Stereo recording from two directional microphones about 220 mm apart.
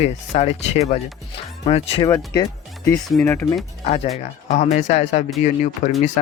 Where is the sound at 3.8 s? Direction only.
30° left (ahead or behind).